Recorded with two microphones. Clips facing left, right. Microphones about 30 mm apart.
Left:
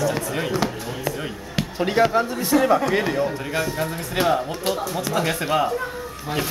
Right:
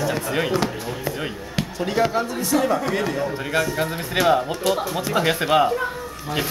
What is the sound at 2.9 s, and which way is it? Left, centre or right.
Speech, centre.